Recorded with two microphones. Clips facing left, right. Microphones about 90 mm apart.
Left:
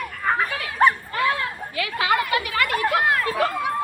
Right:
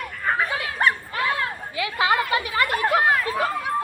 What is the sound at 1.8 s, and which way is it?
Speech, 25° right (ahead or behind).